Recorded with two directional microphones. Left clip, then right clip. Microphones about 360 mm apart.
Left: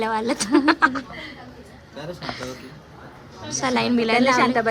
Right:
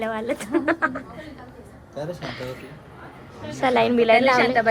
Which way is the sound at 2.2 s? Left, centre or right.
Centre.